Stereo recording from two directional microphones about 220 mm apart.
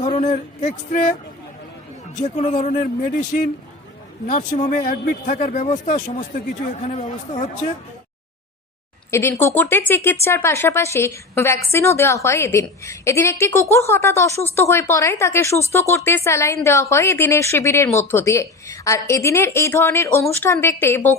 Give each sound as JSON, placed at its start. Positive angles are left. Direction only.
{"t": 0.0, "sound": "speech", "side_deg": 30}
{"t": 2.2, "sound": "speech", "side_deg": 30}
{"t": 9.0, "sound": "speech", "side_deg": 10}